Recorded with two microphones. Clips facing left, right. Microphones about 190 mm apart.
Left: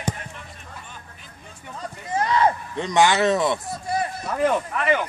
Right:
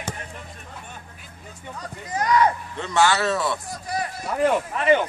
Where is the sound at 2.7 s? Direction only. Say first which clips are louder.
Left 2 dB; 15° left (ahead or behind).